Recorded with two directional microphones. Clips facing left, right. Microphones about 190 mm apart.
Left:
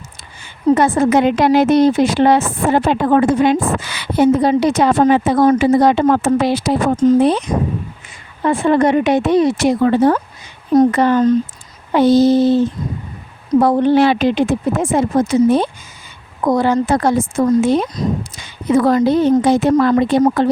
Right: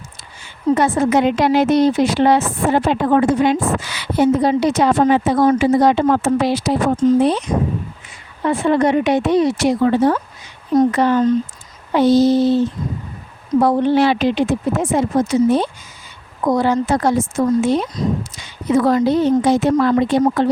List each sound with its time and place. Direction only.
0.7 s a woman's voice: 50° left (ahead or behind)
8.4 s a woman's voice: 50° left (ahead or behind)